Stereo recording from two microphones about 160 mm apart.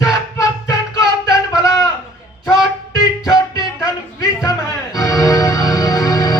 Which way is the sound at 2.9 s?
20° left (ahead or behind).